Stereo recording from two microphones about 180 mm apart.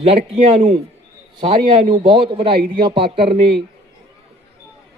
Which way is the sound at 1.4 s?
30° right (ahead or behind).